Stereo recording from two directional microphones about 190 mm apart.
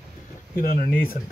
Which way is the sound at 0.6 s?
50° left (ahead or behind).